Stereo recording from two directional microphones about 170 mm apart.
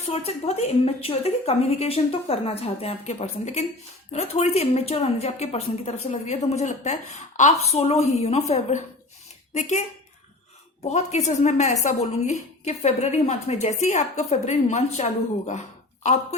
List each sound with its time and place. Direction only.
0.1 s a woman's voice: 35° left (ahead or behind)
10.8 s a woman's voice: 40° left (ahead or behind)